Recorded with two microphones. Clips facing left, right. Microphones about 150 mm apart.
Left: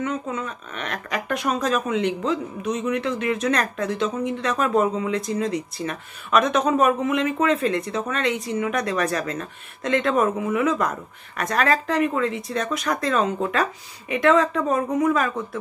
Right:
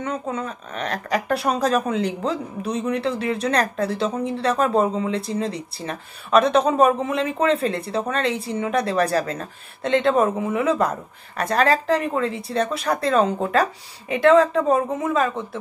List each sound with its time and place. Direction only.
0.0 s speech: 30° right (ahead or behind)